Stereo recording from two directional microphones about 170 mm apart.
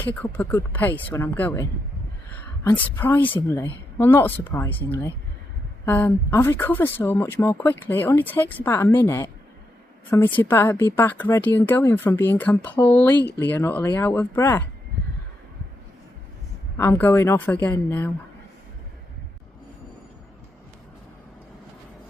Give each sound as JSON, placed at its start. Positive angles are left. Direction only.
{"t": 0.0, "sound": "a woman's voice", "side_deg": 10}
{"t": 16.7, "sound": "speech", "side_deg": 15}